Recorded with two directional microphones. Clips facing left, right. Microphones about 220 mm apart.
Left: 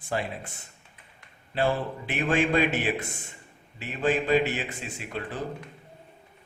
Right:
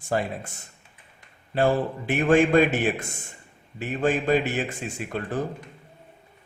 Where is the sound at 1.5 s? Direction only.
45° right (ahead or behind).